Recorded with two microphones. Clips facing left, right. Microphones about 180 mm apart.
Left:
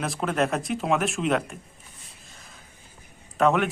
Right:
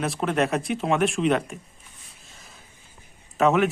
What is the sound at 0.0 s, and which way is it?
A man's voice, centre (ahead or behind).